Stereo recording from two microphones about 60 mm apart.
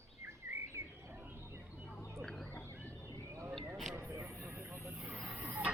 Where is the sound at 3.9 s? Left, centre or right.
Right.